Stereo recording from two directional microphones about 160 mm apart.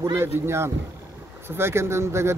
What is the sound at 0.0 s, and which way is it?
Speech, 15° right (ahead or behind).